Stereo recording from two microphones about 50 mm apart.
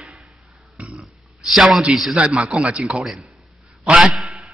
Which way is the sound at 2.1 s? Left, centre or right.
Right.